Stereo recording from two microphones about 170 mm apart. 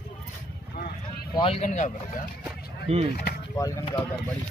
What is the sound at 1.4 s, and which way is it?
Speech, 40° left (ahead or behind).